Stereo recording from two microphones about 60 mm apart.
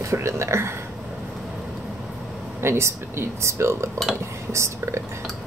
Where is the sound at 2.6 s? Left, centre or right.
Right.